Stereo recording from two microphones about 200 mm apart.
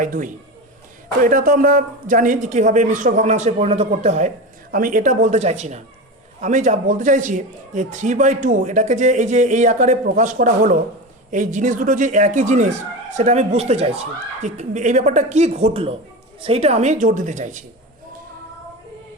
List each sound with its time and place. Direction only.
0.0 s speech: 40° right (ahead or behind)